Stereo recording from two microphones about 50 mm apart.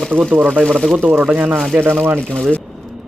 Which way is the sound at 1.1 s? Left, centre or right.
Centre.